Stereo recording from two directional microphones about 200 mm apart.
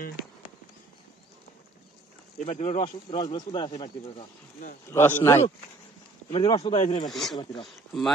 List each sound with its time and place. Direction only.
2.3 s speech: 35° left (ahead or behind)
4.9 s speech: 10° left (ahead or behind)
6.3 s speech: 30° left (ahead or behind)
7.1 s speech: centre (ahead or behind)